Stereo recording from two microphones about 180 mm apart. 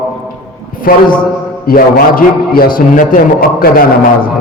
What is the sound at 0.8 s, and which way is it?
A man's voice, 50° left (ahead or behind).